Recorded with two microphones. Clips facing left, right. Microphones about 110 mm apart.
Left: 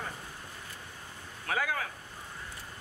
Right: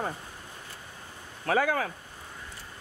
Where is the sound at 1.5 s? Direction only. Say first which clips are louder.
Right 7 dB; 45° right (ahead or behind).